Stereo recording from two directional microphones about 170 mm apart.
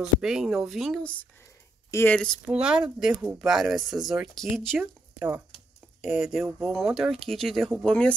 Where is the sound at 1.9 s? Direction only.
15° left (ahead or behind).